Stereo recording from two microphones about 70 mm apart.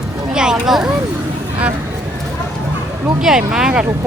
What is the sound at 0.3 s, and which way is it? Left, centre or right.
Speech, centre.